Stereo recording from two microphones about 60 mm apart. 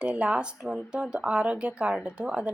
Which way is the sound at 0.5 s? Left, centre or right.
Centre.